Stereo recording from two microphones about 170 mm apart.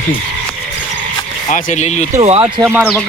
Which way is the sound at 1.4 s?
45° left (ahead or behind).